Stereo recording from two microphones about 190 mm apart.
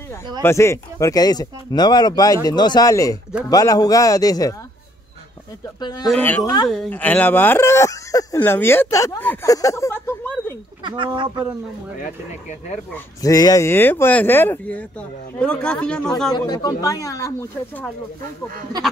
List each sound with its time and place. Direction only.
0.4 s speech: 15° left (ahead or behind)
5.8 s speech: 20° left (ahead or behind)
6.0 s speech: 5° left (ahead or behind)
10.8 s speech: 25° right (ahead or behind)
12.0 s speech: 40° left (ahead or behind)
12.9 s speech: 20° left (ahead or behind); by 16.3 s centre (ahead or behind)
16.3 s speech: 20° left (ahead or behind)